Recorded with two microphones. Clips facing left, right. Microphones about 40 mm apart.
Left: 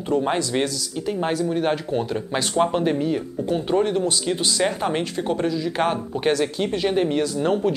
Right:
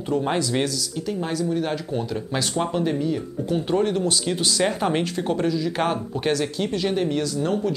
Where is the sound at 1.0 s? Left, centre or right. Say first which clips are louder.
Left 3 dB; left.